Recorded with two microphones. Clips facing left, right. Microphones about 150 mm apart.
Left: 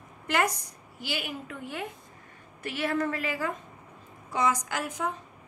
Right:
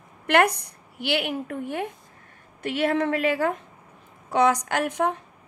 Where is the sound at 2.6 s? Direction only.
65° right (ahead or behind).